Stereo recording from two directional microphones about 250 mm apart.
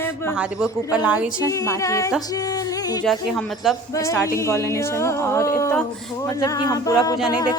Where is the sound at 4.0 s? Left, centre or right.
Centre.